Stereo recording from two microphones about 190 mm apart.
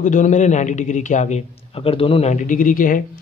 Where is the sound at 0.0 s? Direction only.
40° left (ahead or behind).